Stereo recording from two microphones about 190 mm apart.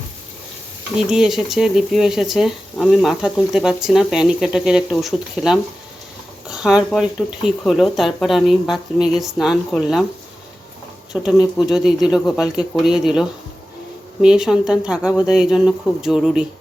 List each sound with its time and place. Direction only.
0.9 s speech: 5° right (ahead or behind)
11.1 s speech: 5° right (ahead or behind)